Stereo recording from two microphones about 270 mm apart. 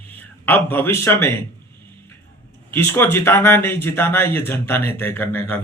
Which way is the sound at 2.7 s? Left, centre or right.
Centre.